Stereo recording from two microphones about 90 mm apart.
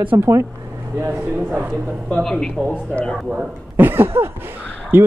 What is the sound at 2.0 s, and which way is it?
Speech, 10° left (ahead or behind).